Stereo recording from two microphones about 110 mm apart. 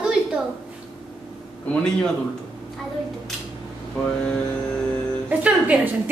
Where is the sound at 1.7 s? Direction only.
10° left (ahead or behind).